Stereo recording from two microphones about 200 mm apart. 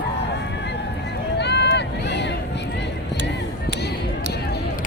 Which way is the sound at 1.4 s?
60° left (ahead or behind).